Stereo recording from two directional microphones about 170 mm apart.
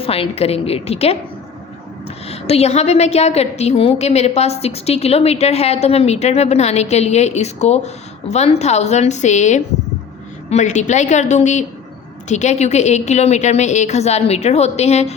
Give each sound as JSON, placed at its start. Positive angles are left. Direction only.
{"t": 0.0, "sound": "a woman's voice", "side_deg": 35}
{"t": 2.2, "sound": "a woman's voice", "side_deg": 40}